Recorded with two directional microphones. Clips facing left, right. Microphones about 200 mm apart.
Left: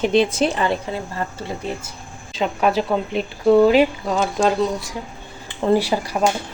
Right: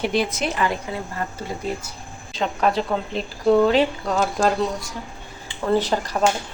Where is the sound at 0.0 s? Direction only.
25° left (ahead or behind).